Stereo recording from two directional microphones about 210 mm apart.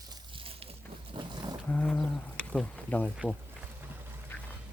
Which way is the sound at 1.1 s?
20° right (ahead or behind).